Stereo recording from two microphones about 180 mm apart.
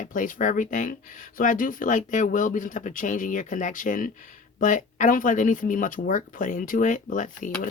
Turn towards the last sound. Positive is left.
turn(degrees=45)  # may be behind; listen again after turning